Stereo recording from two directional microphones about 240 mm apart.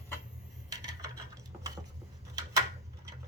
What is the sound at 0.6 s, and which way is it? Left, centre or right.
Coin, centre.